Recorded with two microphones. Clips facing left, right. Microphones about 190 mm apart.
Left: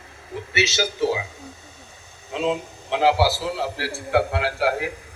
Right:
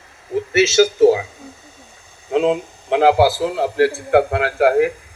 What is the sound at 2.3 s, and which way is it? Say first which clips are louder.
A man's voice: right 7 dB; 55° right (ahead or behind).